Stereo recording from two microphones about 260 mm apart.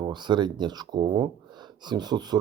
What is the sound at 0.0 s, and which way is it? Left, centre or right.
Speech, centre.